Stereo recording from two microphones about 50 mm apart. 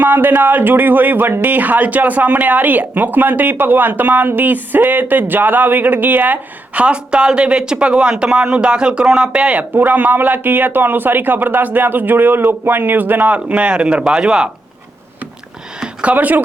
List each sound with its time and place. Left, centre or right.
0.0 s speech: right
6.8 s speech: right
9.7 s speech: right; by 14.5 s centre
15.8 s a sound: right
16.1 s speech: right